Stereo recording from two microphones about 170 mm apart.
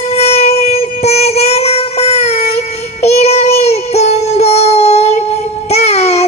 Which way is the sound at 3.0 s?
40° left (ahead or behind).